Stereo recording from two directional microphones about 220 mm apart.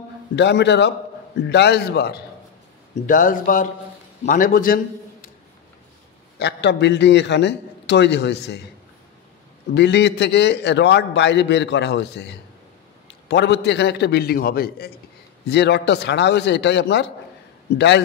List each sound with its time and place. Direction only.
0.4 s a man's voice: 50° left (ahead or behind)
6.4 s a man's voice: 50° left (ahead or behind)
9.8 s a man's voice: 50° left (ahead or behind)
13.3 s a man's voice: 50° left (ahead or behind)